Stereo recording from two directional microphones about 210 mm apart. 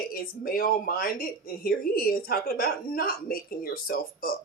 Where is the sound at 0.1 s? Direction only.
45° left (ahead or behind).